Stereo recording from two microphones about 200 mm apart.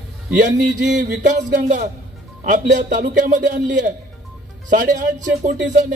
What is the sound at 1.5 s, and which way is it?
A man's voice, 40° right (ahead or behind).